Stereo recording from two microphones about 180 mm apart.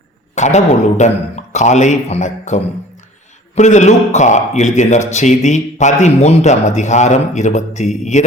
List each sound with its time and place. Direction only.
0.3 s a man's voice: 40° left (ahead or behind)